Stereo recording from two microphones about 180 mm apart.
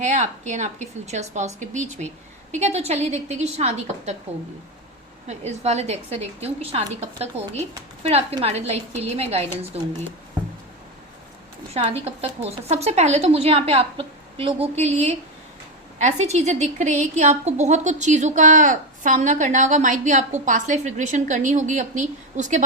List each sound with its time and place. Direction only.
0.0 s a woman's voice: 40° right (ahead or behind)
5.3 s a woman's voice: 40° right (ahead or behind)
11.7 s a woman's voice: 35° right (ahead or behind)